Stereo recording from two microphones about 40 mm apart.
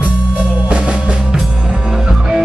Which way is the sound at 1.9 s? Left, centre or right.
Centre.